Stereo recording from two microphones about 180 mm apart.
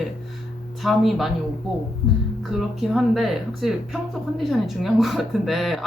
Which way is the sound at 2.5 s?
5° right (ahead or behind).